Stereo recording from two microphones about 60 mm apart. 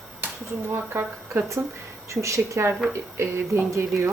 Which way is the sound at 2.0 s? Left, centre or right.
Right.